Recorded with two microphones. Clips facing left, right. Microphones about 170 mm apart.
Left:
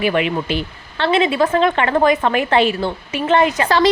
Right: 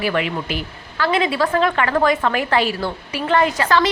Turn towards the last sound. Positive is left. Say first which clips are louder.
# left 3 dB
turn(degrees=35)  # may be behind; listen again after turning